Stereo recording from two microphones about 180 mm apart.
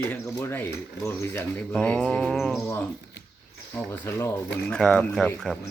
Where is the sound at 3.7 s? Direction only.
10° left (ahead or behind).